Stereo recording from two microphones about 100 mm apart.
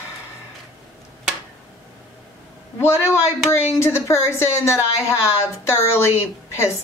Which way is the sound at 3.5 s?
30° left (ahead or behind).